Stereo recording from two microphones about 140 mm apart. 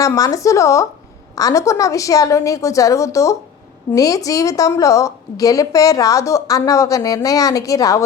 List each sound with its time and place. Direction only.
0.0 s a woman's voice: 25° left (ahead or behind)